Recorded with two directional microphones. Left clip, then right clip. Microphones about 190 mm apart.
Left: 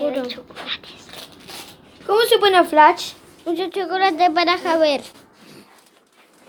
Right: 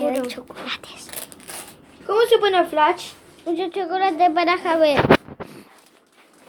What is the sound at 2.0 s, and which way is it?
Speech, 45° left (ahead or behind).